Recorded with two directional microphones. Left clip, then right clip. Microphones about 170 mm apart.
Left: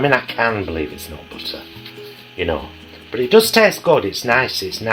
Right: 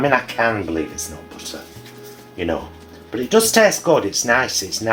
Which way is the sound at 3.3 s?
40° left (ahead or behind).